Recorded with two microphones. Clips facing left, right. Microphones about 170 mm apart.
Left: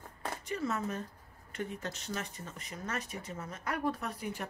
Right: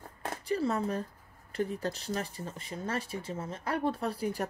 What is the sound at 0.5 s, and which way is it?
A woman's voice, 35° right (ahead or behind).